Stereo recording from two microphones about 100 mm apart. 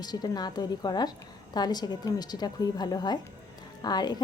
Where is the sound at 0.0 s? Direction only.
45° left (ahead or behind).